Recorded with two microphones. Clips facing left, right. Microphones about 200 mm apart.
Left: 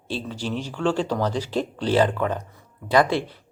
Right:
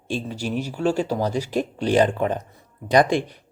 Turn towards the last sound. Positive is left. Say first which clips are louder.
# right 2 dB
turn(degrees=-15)  # may be behind; listen again after turning